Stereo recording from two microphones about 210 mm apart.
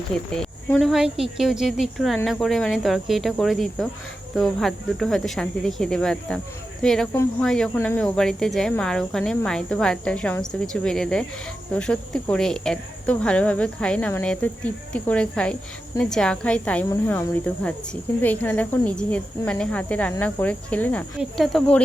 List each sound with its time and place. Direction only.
0.1 s cricket: 5° left (ahead or behind)
18.2 s speech: 10° left (ahead or behind)
21.2 s cricket: centre (ahead or behind)